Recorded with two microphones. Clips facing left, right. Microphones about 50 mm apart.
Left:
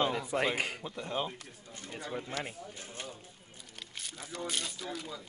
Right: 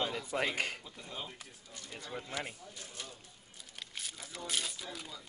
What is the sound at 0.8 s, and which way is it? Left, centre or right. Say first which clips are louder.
Speech: left 10 dB; left.